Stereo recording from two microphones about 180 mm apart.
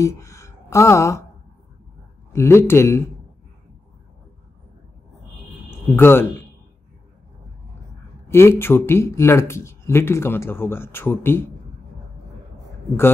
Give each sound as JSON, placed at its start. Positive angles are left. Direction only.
{"t": 0.0, "sound": "speech", "side_deg": 15}
{"t": 2.3, "sound": "speech", "side_deg": 15}
{"t": 5.7, "sound": "speech", "side_deg": 15}
{"t": 8.3, "sound": "speech", "side_deg": 15}